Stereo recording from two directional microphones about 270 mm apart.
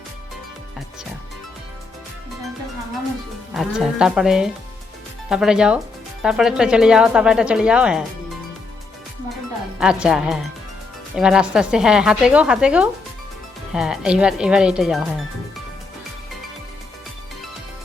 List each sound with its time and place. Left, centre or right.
3.5 s speech: centre
9.8 s speech: centre